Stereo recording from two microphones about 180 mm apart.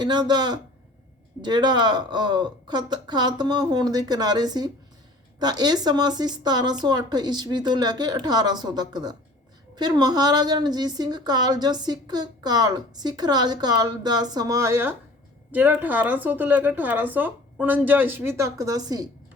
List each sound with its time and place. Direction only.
0.0 s a woman's voice: 25° right (ahead or behind)